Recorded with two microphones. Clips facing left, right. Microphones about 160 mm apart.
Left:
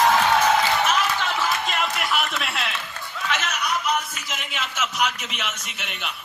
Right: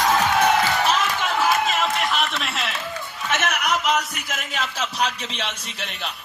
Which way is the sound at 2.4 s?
Centre (ahead or behind).